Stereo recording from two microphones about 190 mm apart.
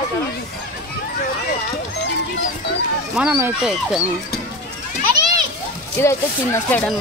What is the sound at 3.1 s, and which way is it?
Speech, 5° right (ahead or behind).